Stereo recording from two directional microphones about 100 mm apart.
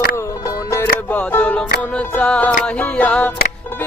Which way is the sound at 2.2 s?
10° left (ahead or behind).